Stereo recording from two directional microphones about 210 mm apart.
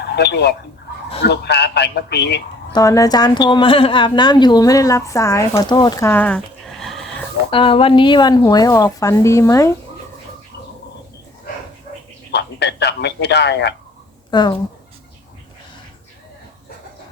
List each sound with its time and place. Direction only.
0.0 s a man's voice: 50° left (ahead or behind)
2.7 s a woman's voice: 15° left (ahead or behind)
5.5 s a sound: 20° left (ahead or behind); by 7.3 s centre (ahead or behind)
7.5 s speech: 25° left (ahead or behind)
12.3 s speech: 55° left (ahead or behind)
14.3 s speech: 20° left (ahead or behind)